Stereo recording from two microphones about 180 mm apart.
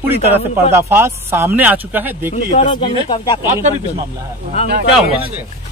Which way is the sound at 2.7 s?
25° left (ahead or behind).